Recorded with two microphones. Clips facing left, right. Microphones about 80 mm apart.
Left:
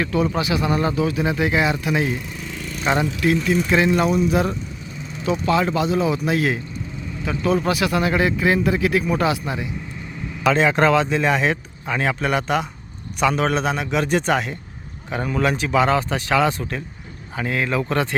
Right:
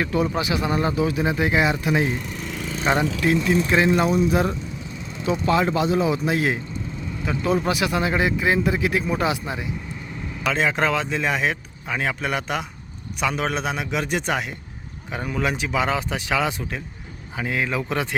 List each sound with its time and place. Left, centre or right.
0.0 s speech: right
3.2 s speech: right
10.4 s speech: centre